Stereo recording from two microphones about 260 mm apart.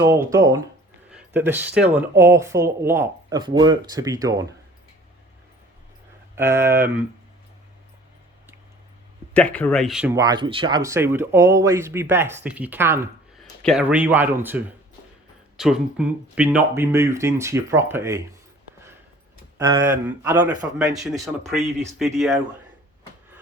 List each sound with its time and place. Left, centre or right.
0.0 s speech: centre
6.3 s speech: centre
9.3 s speech: centre
13.4 s speech: centre
19.5 s speech: centre